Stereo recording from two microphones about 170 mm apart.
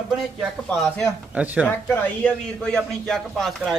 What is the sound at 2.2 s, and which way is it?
A man's voice, 5° left (ahead or behind).